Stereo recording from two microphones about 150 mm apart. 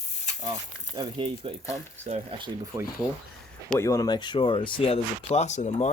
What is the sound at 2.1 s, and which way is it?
Speech, 45° right (ahead or behind).